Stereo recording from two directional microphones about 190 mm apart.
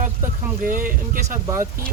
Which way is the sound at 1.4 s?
15° right (ahead or behind).